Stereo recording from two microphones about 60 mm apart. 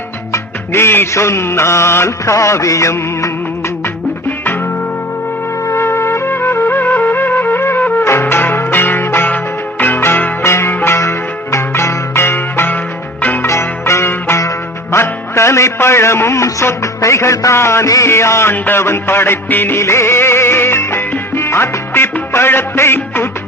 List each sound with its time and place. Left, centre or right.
0.7 s music: left
5.6 s music: left
10.4 s music: left
13.5 s music: left
17.6 s music: left
17.8 s music: left
18.1 s music: left
18.5 s music: left
18.8 s music: left